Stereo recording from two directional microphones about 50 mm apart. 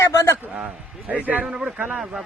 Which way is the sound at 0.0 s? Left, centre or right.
Left.